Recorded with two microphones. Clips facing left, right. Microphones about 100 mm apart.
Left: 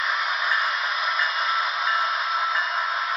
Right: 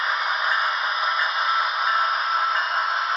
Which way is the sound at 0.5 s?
15° right (ahead or behind).